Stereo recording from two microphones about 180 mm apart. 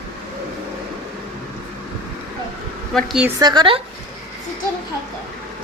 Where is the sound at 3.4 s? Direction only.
25° right (ahead or behind).